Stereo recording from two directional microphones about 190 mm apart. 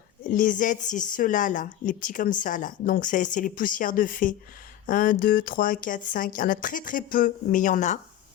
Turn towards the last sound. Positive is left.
turn(degrees=40)  # may be behind; listen again after turning